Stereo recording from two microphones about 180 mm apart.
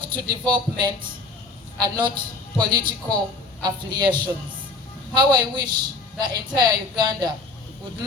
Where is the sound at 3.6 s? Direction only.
25° right (ahead or behind).